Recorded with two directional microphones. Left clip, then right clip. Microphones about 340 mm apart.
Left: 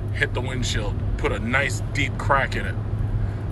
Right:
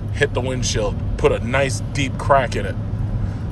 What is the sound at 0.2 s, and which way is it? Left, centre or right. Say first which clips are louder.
Speech: right 5 dB; centre.